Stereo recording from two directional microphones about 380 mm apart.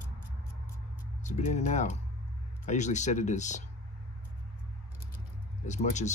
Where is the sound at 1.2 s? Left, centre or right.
Centre.